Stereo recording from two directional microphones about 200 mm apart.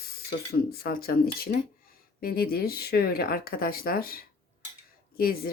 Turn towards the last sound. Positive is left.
turn(degrees=50)  # may be behind; listen again after turning